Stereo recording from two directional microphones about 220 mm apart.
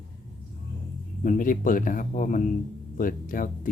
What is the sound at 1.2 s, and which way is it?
Speech, 35° left (ahead or behind).